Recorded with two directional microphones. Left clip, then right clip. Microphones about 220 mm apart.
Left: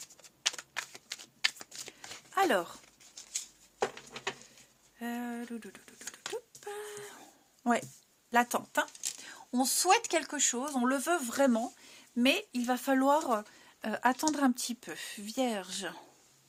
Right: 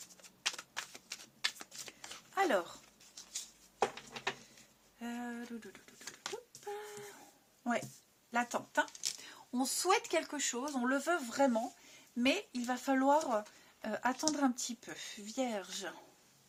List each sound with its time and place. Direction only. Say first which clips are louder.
0.4 s typing: left 5 dB; 5° left (ahead or behind)
2.3 s speech: left 4 dB; 35° left (ahead or behind)
4.9 s speech: left 5 dB; 35° left (ahead or behind)
6.3 s a sound: left 6 dB; 45° left (ahead or behind)
7.6 s speech: left 6 dB; 45° left (ahead or behind)